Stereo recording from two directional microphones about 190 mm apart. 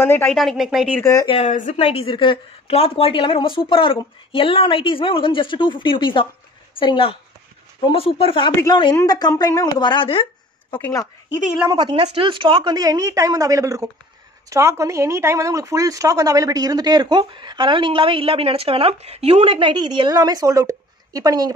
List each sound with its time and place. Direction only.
0.0 s a woman's voice: 10° left (ahead or behind)
0.4 s speech: centre (ahead or behind)
1.0 s a woman's voice: 20° left (ahead or behind)
1.3 s a woman's voice: 40° left (ahead or behind); by 11.1 s 15° left (ahead or behind)
11.7 s speech: 25° right (ahead or behind)